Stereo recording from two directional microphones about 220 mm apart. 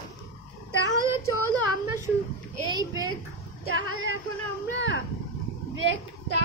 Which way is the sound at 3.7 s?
65° right (ahead or behind).